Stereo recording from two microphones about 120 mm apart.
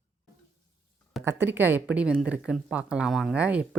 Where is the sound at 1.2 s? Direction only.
20° right (ahead or behind).